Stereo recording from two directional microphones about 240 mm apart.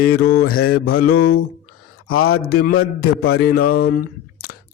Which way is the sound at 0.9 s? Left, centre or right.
Left.